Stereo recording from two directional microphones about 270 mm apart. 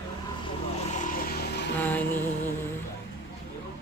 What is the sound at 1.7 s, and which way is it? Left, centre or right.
Speech, centre.